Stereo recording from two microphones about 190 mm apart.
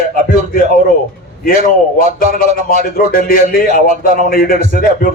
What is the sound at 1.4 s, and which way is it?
Speech, 50° left (ahead or behind).